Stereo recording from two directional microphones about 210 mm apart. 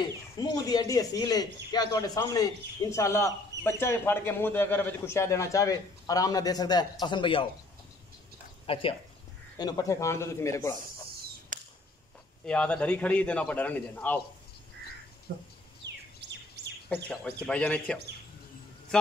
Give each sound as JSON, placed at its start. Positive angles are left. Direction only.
{"t": 0.4, "sound": "speech", "side_deg": 20}
{"t": 8.6, "sound": "speech", "side_deg": 25}
{"t": 11.5, "sound": "a sound", "side_deg": -40}
{"t": 12.4, "sound": "speech", "side_deg": 5}
{"t": 15.3, "sound": "speech", "side_deg": -50}
{"t": 16.2, "sound": "chirp", "side_deg": -55}
{"t": 16.9, "sound": "speech", "side_deg": 5}